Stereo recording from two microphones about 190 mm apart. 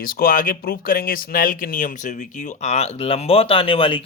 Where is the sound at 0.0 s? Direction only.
50° left (ahead or behind).